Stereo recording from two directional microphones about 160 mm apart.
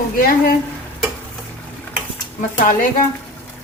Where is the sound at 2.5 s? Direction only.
55° left (ahead or behind).